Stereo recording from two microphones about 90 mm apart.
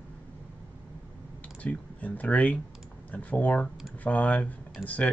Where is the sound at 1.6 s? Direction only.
15° left (ahead or behind).